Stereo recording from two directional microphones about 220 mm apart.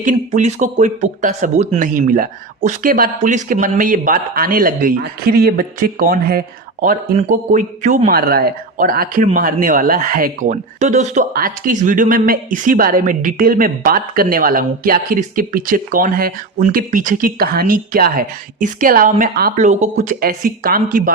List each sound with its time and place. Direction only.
0.0 s a man's voice: 35° right (ahead or behind)